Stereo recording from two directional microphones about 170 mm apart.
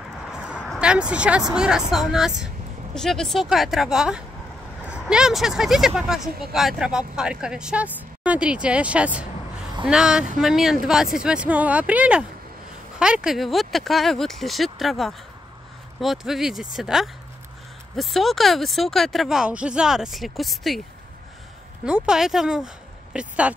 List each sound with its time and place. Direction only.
0.3 s a sound: 5° right (ahead or behind)
1.5 s speech: 5° right (ahead or behind)
21.8 s speech: 5° right (ahead or behind)